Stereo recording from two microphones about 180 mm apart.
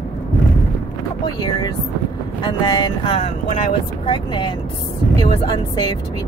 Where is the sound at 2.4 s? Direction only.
20° left (ahead or behind).